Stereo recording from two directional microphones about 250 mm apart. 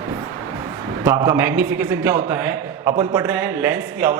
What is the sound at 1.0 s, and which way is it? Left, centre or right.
A man's voice, centre.